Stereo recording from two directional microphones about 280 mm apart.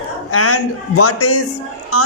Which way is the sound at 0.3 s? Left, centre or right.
Left.